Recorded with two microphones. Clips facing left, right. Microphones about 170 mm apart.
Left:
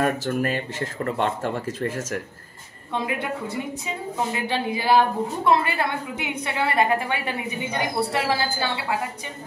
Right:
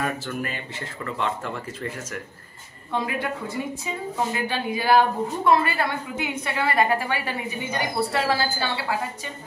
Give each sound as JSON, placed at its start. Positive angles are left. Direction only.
{"t": 0.0, "sound": "speech", "side_deg": 45}
{"t": 2.9, "sound": "a woman's voice", "side_deg": 20}
{"t": 4.5, "sound": "a woman's voice", "side_deg": 25}